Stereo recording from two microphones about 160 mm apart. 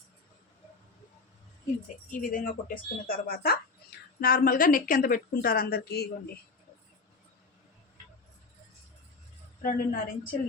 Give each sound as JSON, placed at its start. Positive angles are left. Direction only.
{"t": 2.0, "sound": "speech", "side_deg": 55}
{"t": 9.6, "sound": "speech", "side_deg": 65}